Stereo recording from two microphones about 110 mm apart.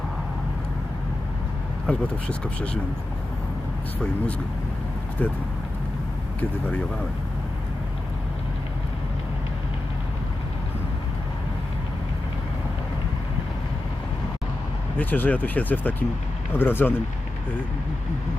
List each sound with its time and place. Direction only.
1.9 s speech: 10° left (ahead or behind)
5.2 s speech: 15° left (ahead or behind)
14.9 s speech: 15° left (ahead or behind)